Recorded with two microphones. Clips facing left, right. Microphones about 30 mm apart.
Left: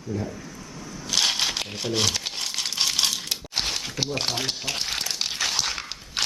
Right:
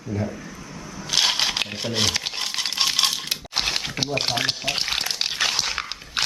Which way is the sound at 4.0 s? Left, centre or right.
Centre.